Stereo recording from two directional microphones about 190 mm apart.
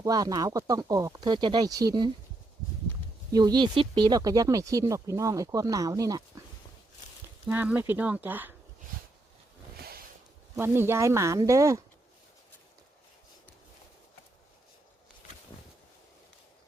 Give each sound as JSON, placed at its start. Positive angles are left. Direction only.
{"t": 0.0, "sound": "speech", "side_deg": -20}
{"t": 3.3, "sound": "speech", "side_deg": -20}
{"t": 7.4, "sound": "speech", "side_deg": -10}
{"t": 9.7, "sound": "snort", "side_deg": -55}
{"t": 10.6, "sound": "speech", "side_deg": -10}